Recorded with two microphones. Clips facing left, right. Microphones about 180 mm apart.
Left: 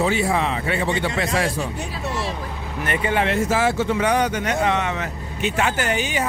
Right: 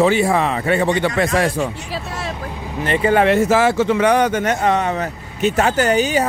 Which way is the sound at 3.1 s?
65° right (ahead or behind).